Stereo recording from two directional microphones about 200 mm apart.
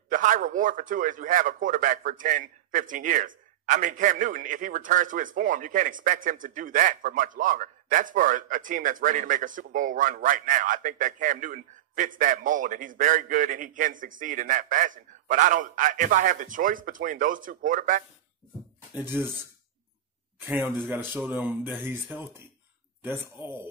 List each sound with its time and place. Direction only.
0.1 s a man's voice: 40° right (ahead or behind)
19.0 s speech: 10° right (ahead or behind)